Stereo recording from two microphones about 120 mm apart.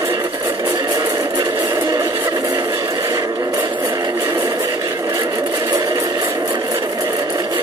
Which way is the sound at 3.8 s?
25° right (ahead or behind).